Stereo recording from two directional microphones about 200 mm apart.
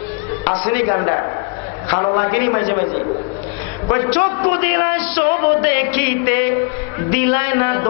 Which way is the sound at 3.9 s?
20° left (ahead or behind).